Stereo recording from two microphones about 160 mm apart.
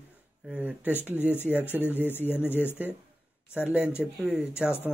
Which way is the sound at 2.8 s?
10° right (ahead or behind).